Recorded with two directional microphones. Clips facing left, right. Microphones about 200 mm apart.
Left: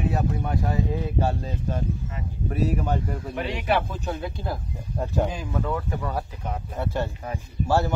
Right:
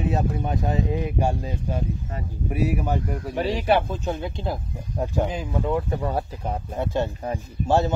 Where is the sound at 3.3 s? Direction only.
35° right (ahead or behind).